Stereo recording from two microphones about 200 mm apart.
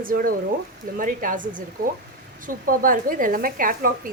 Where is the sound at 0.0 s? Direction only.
45° right (ahead or behind).